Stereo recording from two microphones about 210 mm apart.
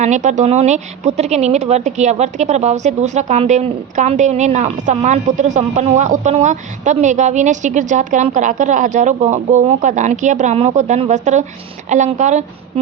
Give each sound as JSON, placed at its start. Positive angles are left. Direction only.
{"t": 0.0, "sound": "speech", "side_deg": -35}